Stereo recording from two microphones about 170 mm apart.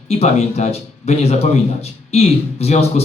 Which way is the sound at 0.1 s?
40° left (ahead or behind).